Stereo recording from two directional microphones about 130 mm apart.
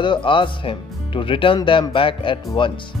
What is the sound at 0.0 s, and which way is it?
Speech, 40° left (ahead or behind).